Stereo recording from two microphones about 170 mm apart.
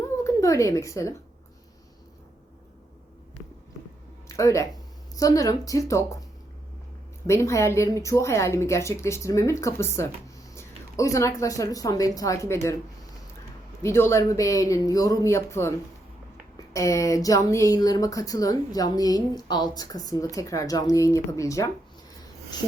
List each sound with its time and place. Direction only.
0.3 s a woman's voice: 20° left (ahead or behind)
4.3 s speech: 20° left (ahead or behind)
7.3 s a woman's voice: 15° left (ahead or behind)
13.8 s a woman's voice: 15° left (ahead or behind)
16.7 s speech: 20° left (ahead or behind)